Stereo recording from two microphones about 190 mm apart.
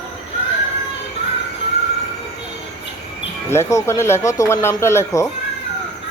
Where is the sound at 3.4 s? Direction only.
15° left (ahead or behind).